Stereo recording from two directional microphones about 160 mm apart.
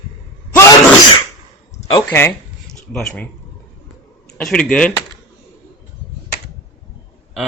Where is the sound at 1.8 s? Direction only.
25° left (ahead or behind).